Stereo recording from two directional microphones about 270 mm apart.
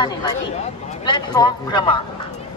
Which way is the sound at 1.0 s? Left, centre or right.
Centre.